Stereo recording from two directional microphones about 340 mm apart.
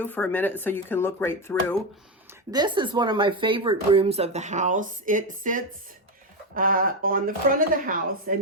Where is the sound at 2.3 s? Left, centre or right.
Centre.